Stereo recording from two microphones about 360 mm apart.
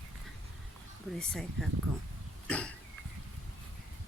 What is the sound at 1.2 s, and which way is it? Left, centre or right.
Speech, centre.